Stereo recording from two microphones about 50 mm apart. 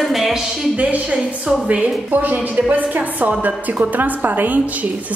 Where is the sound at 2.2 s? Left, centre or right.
Right.